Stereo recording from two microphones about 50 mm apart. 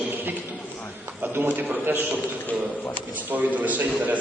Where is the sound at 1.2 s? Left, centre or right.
Right.